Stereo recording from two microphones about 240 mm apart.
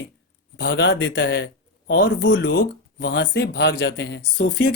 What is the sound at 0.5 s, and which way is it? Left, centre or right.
Speech, left.